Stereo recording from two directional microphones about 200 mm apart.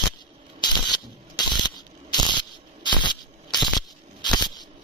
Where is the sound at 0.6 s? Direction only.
20° left (ahead or behind).